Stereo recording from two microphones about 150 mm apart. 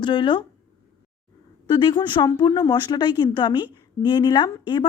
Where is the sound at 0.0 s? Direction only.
35° left (ahead or behind).